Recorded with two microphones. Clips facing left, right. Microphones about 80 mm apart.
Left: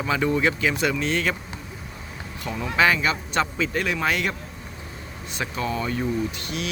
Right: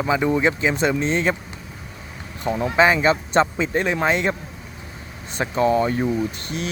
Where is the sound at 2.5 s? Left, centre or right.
Right.